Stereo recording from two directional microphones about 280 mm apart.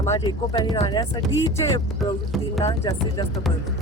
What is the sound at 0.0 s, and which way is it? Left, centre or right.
A woman's voice, centre.